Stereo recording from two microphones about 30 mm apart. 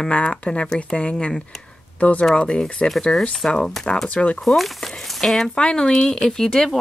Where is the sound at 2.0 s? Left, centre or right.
Left.